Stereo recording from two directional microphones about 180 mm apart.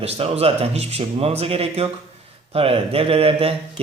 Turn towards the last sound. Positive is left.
turn(degrees=-30)  # may be behind; listen again after turning